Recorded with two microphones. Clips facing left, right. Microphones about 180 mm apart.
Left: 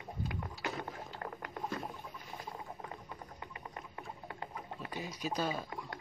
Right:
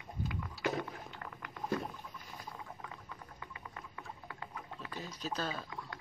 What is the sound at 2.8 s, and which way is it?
Music, 30° left (ahead or behind).